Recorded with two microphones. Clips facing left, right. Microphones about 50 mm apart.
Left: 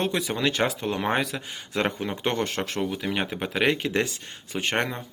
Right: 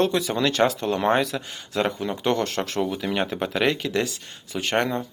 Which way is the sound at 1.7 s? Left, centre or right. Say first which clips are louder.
Right 2 dB; left.